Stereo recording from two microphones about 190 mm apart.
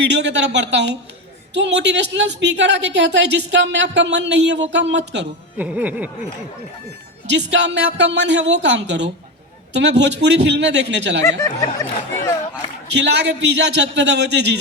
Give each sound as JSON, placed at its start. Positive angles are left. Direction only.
{"t": 0.0, "sound": "a woman's voice", "side_deg": -65}
{"t": 5.5, "sound": "speech", "side_deg": -10}
{"t": 7.5, "sound": "a woman's voice", "side_deg": -70}
{"t": 11.3, "sound": "speech", "side_deg": 15}
{"t": 12.9, "sound": "a man's voice", "side_deg": -65}